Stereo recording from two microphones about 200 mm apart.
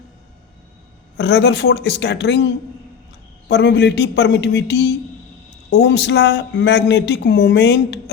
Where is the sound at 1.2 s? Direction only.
60° left (ahead or behind).